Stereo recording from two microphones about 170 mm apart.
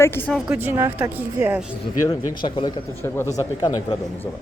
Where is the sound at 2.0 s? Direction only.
25° left (ahead or behind).